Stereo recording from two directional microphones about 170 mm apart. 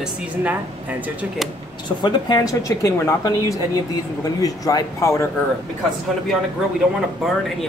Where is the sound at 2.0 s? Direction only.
25° left (ahead or behind).